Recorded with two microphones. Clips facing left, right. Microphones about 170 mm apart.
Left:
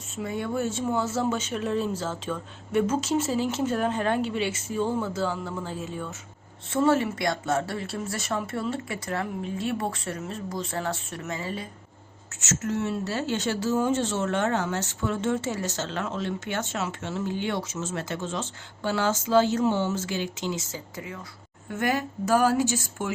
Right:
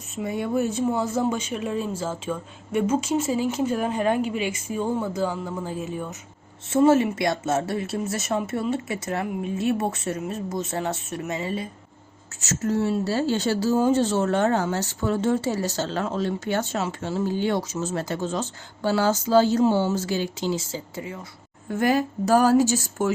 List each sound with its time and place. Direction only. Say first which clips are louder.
0.3 s a woman's voice: right 4 dB; 20° right (ahead or behind)
12.4 s a woman's voice: right 4 dB; 35° right (ahead or behind)